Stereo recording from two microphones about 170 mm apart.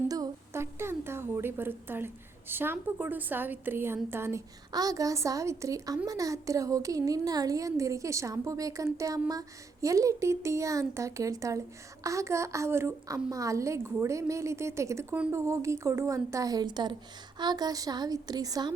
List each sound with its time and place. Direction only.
0.1 s a woman's voice: 20° right (ahead or behind)